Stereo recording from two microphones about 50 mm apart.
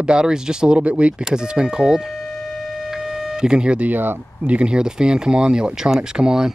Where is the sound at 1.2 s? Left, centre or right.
Centre.